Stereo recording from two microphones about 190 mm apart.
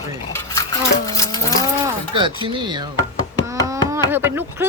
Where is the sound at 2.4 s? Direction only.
25° right (ahead or behind).